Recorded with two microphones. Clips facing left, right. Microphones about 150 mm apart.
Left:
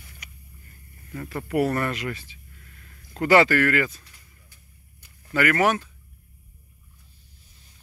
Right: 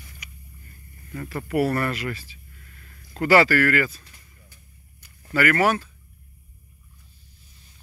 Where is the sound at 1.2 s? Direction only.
20° left (ahead or behind).